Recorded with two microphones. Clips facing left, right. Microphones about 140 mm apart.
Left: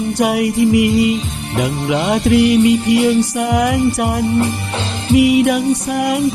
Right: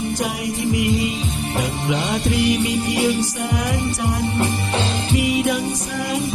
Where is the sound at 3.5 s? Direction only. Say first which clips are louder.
Left 11 dB; 75° left (ahead or behind).